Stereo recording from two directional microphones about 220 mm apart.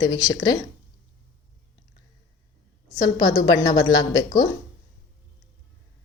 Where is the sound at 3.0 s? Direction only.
15° left (ahead or behind).